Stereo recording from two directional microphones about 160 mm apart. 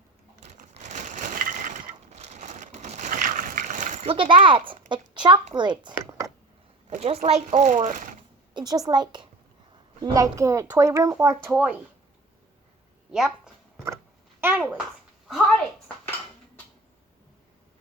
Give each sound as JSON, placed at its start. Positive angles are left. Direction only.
{"t": 0.7, "sound": "crushing", "side_deg": -50}
{"t": 4.1, "sound": "a child's voice", "side_deg": -35}
{"t": 6.9, "sound": "speech", "side_deg": -45}
{"t": 8.5, "sound": "a woman's voice", "side_deg": -25}
{"t": 13.1, "sound": "a sound", "side_deg": -5}
{"t": 14.4, "sound": "a child's voice", "side_deg": -10}